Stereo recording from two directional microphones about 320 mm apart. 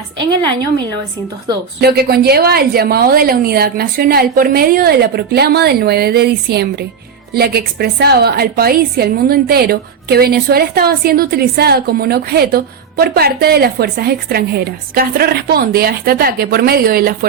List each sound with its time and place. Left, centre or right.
1.8 s a woman's voice: right